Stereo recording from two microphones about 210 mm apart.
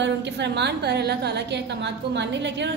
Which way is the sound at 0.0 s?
55° right (ahead or behind).